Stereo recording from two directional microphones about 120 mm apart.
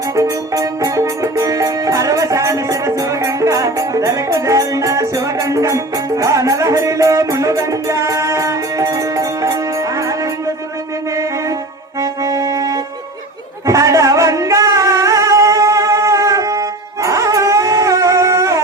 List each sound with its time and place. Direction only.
0.2 s music: 25° right (ahead or behind)